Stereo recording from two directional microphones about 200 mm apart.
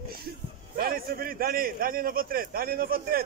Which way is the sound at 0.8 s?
45° right (ahead or behind).